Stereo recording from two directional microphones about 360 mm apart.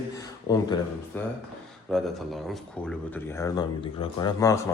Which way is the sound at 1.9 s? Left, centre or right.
Centre.